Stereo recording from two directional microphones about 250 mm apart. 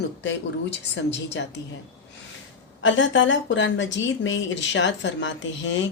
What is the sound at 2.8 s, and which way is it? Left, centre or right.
Speech, left.